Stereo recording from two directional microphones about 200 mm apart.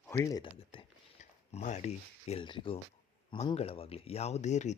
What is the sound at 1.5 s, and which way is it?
Speech, 35° left (ahead or behind).